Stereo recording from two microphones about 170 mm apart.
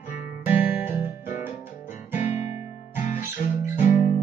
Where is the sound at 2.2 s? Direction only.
45° left (ahead or behind).